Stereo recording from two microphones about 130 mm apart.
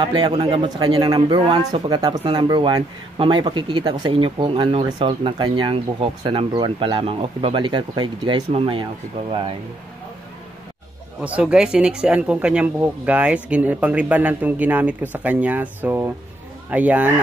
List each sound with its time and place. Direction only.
0.0 s speech: 35° right (ahead or behind)
8.5 s speech: 45° right (ahead or behind)
11.1 s speech: 10° right (ahead or behind)